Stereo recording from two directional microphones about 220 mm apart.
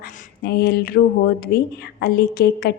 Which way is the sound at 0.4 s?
45° left (ahead or behind).